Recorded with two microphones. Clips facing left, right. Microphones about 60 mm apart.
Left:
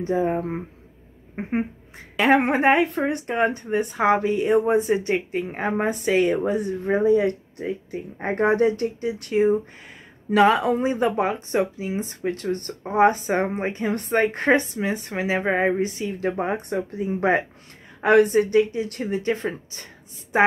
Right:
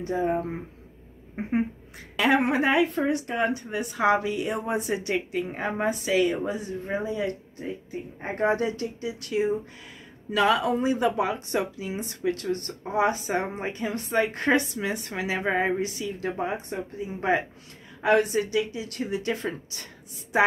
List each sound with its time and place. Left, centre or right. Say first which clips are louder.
0.0 s speech: left 3 dB; left
5.6 s speech: left 4 dB; left
11.3 s speech: left 5 dB; left
16.3 s speech: left 5 dB; left
18.0 s speech: left 6 dB; left